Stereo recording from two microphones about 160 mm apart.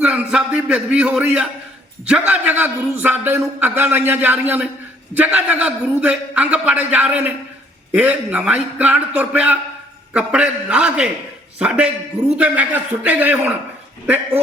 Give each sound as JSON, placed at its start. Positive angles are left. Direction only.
{"t": 0.0, "sound": "a man's voice", "side_deg": -5}